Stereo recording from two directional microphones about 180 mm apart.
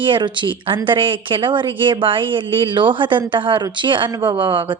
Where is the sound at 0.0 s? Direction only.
25° right (ahead or behind).